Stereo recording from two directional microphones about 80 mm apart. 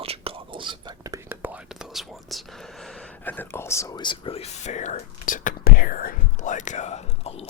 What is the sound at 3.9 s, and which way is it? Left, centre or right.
Speech, left.